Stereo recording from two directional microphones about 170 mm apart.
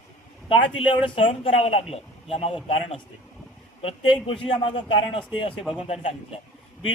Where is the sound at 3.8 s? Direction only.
30° left (ahead or behind).